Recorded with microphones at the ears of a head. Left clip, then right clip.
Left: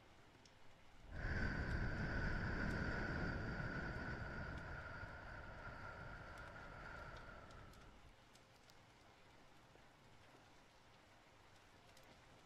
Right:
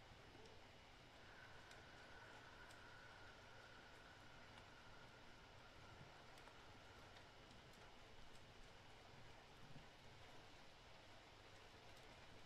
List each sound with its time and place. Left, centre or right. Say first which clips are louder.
1.1 s vehicle: left 19 dB; left